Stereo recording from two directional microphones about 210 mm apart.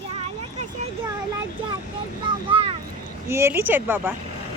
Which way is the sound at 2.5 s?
25° right (ahead or behind).